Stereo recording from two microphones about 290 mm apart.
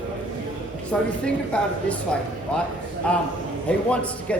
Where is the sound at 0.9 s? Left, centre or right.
Centre.